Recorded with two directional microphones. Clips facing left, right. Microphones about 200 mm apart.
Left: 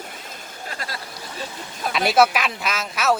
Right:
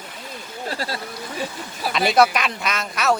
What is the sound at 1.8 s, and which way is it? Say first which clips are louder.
Speech: even; centre (ahead or behind).